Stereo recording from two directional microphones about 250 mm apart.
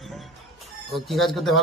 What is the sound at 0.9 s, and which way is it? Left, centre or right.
Speech, centre.